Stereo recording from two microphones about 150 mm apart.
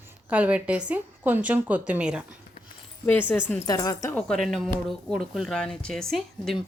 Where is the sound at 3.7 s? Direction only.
25° left (ahead or behind).